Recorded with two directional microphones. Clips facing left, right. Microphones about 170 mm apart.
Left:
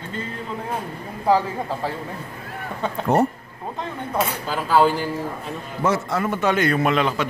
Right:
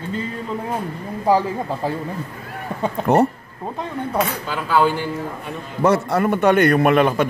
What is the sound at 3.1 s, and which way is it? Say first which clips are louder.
Speech: right 3 dB; 70° right (ahead or behind).